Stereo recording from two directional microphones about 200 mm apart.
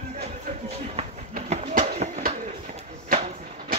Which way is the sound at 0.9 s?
35° right (ahead or behind).